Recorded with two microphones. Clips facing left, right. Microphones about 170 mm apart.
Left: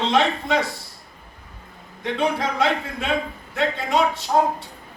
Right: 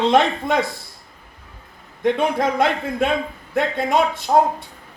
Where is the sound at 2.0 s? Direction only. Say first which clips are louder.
Right 4 dB; 50° right (ahead or behind).